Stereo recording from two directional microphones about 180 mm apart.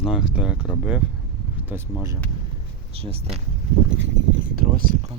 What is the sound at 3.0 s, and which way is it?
Speech, 35° right (ahead or behind).